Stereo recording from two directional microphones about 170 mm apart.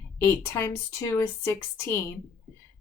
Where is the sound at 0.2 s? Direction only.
15° left (ahead or behind).